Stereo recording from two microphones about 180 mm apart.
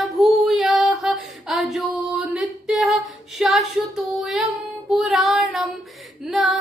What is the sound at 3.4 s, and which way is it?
Female singing, centre (ahead or behind).